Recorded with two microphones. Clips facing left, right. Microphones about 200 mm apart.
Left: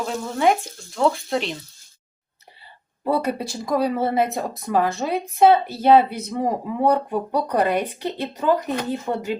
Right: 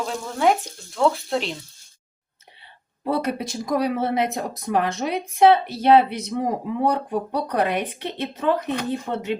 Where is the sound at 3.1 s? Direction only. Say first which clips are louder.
Left 1 dB; 65° right (ahead or behind).